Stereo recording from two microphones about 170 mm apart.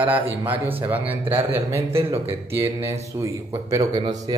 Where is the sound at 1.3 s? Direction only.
35° right (ahead or behind).